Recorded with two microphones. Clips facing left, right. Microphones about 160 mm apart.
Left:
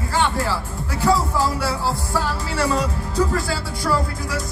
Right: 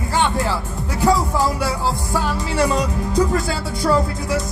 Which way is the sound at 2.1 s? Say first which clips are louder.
Right 3 dB; 15° right (ahead or behind).